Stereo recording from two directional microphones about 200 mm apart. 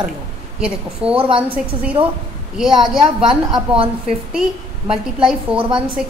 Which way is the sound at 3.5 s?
25° right (ahead or behind).